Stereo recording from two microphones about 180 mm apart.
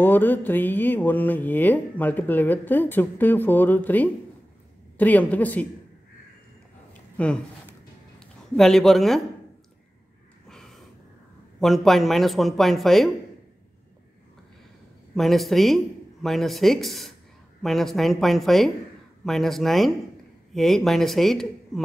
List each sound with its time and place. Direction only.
0.0 s speech: 10° left (ahead or behind)
6.9 s a sound: 5° left (ahead or behind)
8.5 s speech: centre (ahead or behind)
10.5 s a sound: centre (ahead or behind)
11.6 s speech: centre (ahead or behind)
15.1 s speech: centre (ahead or behind)